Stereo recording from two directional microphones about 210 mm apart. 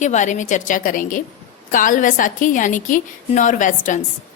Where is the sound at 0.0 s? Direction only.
35° left (ahead or behind).